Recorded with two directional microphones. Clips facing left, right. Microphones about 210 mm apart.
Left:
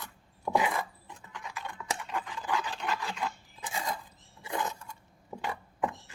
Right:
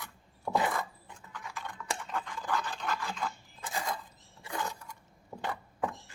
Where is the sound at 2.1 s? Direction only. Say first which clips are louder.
Left 1 dB; 10° left (ahead or behind).